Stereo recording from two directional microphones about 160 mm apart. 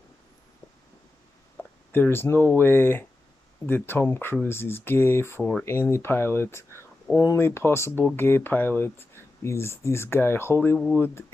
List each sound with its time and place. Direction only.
1.9 s speech: 15° left (ahead or behind)